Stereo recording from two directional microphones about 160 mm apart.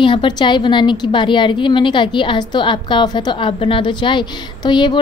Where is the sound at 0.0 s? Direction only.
30° left (ahead or behind).